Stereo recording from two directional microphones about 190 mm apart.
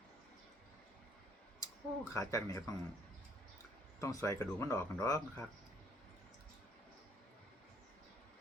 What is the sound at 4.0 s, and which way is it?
Speech, 15° left (ahead or behind).